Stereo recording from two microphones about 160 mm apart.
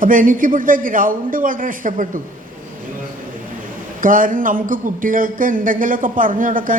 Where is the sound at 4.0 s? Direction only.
60° right (ahead or behind).